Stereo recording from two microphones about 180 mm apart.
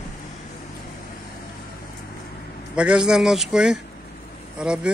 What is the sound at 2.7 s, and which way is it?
Speech, 5° right (ahead or behind).